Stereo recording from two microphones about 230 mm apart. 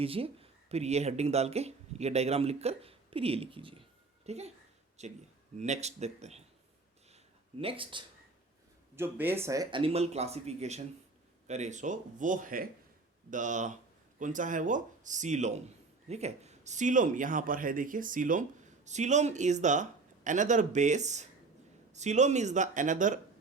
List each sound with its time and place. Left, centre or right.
0.0 s speech: right
7.6 s speech: right
9.0 s speech: centre; by 23.2 s right